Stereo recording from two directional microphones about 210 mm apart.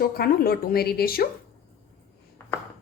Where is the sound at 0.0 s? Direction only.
45° left (ahead or behind).